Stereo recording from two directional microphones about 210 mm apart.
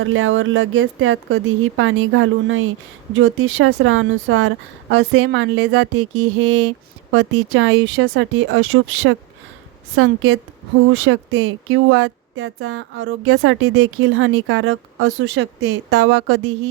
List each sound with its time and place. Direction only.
0.0 s speech: 70° right (ahead or behind)
6.0 s music: 90° right
7.1 s speech: 75° right (ahead or behind); by 16.4 s 60° right (ahead or behind)